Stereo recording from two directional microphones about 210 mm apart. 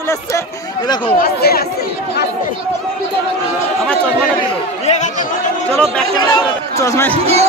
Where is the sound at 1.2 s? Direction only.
45° left (ahead or behind).